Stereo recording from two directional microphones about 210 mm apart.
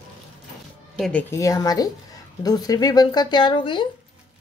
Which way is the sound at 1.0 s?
5° left (ahead or behind).